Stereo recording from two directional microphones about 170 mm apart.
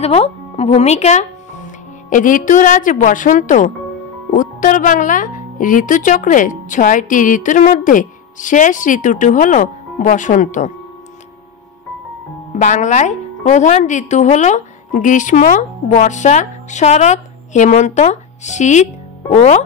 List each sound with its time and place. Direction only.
0.0 s speech: 40° left (ahead or behind)
12.5 s speech: 45° left (ahead or behind)